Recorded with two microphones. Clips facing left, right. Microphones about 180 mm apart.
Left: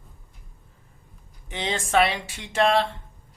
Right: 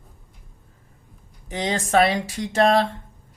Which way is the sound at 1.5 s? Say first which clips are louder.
Right 4 dB; 40° right (ahead or behind).